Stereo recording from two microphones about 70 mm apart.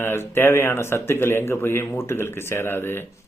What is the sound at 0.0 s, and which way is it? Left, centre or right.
Speech, left.